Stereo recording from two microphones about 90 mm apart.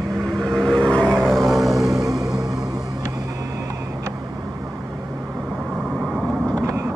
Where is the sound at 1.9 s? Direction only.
40° right (ahead or behind).